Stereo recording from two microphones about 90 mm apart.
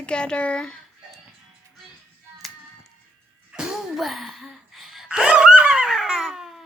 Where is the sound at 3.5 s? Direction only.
10° right (ahead or behind).